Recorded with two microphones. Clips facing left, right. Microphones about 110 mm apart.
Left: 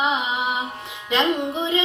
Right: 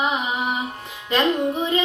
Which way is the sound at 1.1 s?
20° left (ahead or behind).